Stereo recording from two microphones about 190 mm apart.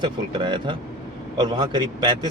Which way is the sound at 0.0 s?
25° right (ahead or behind).